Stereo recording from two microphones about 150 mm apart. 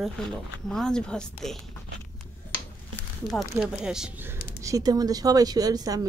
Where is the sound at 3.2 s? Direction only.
Centre (ahead or behind).